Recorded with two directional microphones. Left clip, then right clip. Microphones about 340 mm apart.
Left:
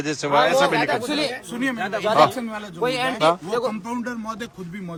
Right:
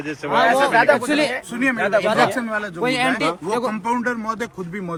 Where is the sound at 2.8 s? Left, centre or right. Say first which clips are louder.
Right 2 dB; right.